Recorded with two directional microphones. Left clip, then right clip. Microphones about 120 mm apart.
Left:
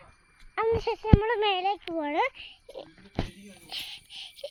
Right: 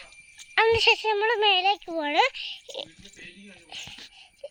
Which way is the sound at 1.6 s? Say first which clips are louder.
Right 4 dB; 30° right (ahead or behind).